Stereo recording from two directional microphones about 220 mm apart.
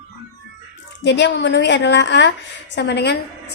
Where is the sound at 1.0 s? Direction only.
55° left (ahead or behind).